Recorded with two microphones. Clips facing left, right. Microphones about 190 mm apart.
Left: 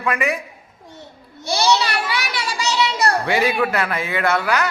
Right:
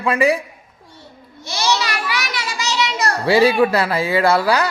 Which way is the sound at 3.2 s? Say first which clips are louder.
Right 5 dB; 35° right (ahead or behind).